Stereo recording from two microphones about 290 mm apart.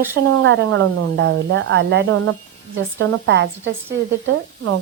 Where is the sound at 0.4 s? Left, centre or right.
Right.